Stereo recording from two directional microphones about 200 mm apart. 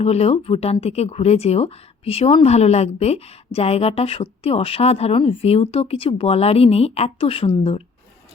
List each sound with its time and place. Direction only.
0.0 s speech: 30° left (ahead or behind)